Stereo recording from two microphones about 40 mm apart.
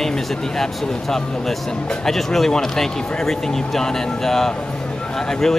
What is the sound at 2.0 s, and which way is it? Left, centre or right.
Speech, centre.